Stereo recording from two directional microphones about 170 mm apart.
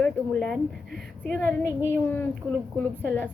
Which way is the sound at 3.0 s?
10° left (ahead or behind).